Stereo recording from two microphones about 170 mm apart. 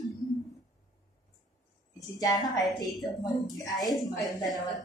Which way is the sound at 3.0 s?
Centre (ahead or behind).